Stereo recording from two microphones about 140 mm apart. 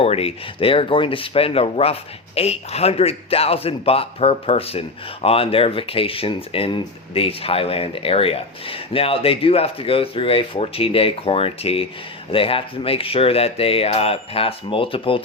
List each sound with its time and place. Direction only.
0.0 s speech: 45° left (ahead or behind)